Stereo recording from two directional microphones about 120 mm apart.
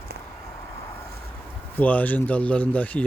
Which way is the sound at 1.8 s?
15° left (ahead or behind).